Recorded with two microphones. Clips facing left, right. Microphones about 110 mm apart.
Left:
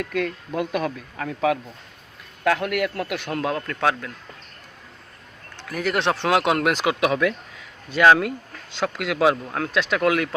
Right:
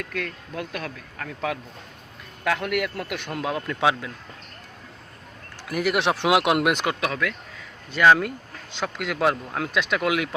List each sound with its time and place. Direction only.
0.0 s speech: 5° left (ahead or behind); by 4.1 s 10° right (ahead or behind)
5.6 s speech: 10° right (ahead or behind)
7.0 s speech: 20° left (ahead or behind)
7.9 s speech: 5° left (ahead or behind)